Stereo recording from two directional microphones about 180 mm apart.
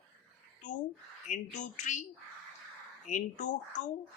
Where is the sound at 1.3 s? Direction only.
45° left (ahead or behind).